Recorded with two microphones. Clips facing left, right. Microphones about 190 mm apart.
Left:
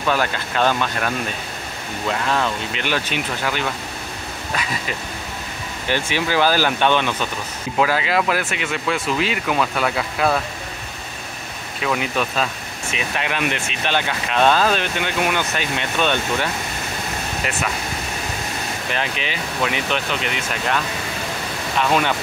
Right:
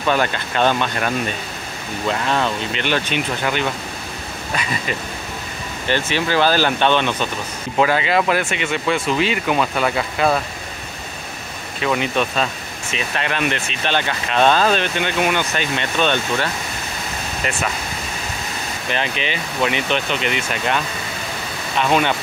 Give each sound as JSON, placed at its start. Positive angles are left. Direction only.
{"t": 0.1, "sound": "speech", "side_deg": 5}
{"t": 2.0, "sound": "speech", "side_deg": 0}
{"t": 5.9, "sound": "speech", "side_deg": 10}
{"t": 11.8, "sound": "speech", "side_deg": 0}
{"t": 18.9, "sound": "speech", "side_deg": 0}